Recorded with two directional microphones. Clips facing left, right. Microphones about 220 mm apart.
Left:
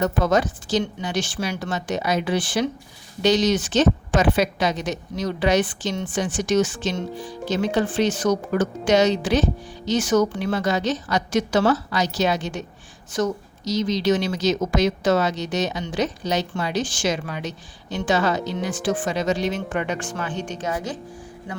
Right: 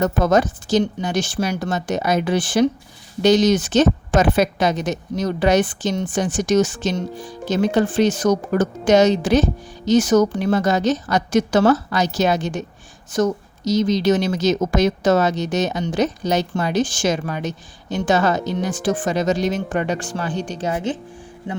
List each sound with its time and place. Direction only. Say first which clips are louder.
0.0 s a woman's voice: right 3 dB; 45° right (ahead or behind); by 20.9 s 30° right (ahead or behind)